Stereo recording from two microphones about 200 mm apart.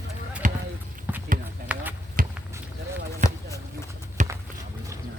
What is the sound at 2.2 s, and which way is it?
Basketball bounce, 40° right (ahead or behind).